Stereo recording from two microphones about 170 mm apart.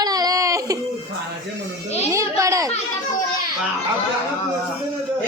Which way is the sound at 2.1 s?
20° right (ahead or behind).